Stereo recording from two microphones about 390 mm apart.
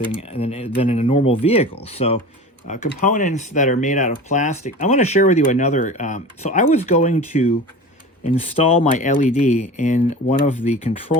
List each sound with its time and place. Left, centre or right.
0.2 s speech: centre